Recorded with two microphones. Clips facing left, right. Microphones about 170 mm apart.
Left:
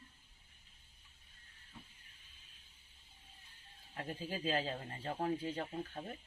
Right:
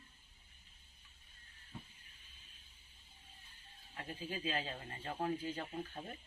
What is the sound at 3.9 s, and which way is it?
Speech, 40° left (ahead or behind).